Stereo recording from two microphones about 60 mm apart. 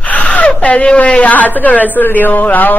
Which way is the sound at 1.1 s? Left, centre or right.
Left.